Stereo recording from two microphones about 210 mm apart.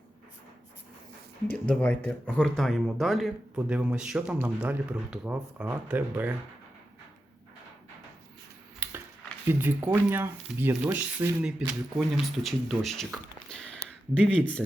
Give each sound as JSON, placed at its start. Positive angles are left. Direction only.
{"t": 1.6, "sound": "speech", "side_deg": 5}
{"t": 8.8, "sound": "a sound", "side_deg": -5}
{"t": 9.5, "sound": "speech", "side_deg": -10}